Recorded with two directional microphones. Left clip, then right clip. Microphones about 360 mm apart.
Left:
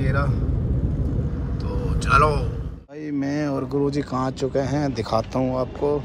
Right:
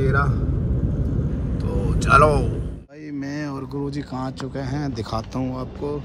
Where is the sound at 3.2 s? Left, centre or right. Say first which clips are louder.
Left 5 dB; centre.